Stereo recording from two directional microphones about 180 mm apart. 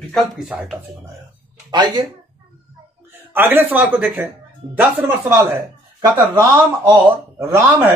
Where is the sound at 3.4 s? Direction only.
10° right (ahead or behind).